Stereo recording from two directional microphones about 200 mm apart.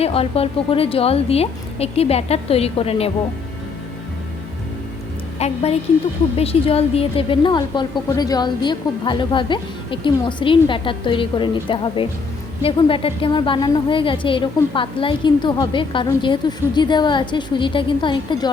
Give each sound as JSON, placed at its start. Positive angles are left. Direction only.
{"t": 0.0, "sound": "a woman's voice", "side_deg": 30}
{"t": 5.4, "sound": "a woman's voice", "side_deg": 30}